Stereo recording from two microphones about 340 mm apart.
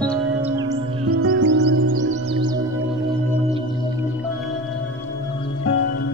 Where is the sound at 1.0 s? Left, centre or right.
Right.